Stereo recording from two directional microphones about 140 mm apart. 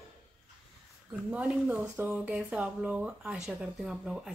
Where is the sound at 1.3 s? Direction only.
10° right (ahead or behind).